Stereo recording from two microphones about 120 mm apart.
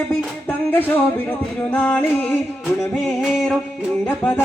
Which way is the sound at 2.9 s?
Centre (ahead or behind).